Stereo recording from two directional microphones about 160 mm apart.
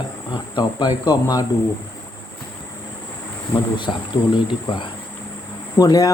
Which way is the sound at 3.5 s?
30° left (ahead or behind).